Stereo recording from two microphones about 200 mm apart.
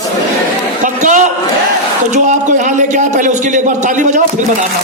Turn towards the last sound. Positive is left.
turn(degrees=-40)  # may be behind; listen again after turning